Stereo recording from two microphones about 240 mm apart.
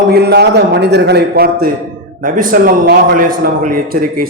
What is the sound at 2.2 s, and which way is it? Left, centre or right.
A man's voice, right.